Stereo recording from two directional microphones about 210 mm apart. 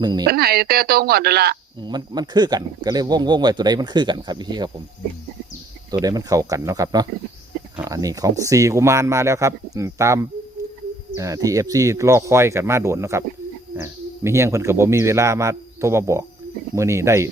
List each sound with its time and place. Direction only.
0.0 s speech: 20° right (ahead or behind)
0.3 s speech: 45° right (ahead or behind)
1.8 s speech: 20° right (ahead or behind)
5.9 s speech: 20° right (ahead or behind)